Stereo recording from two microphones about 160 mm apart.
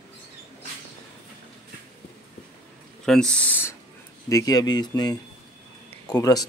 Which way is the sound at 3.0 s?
5° left (ahead or behind).